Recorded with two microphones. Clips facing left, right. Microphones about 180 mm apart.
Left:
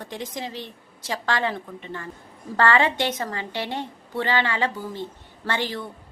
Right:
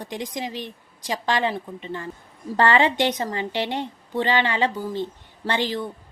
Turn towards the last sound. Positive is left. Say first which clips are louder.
# right 3 dB
turn(degrees=-15)  # may be behind; listen again after turning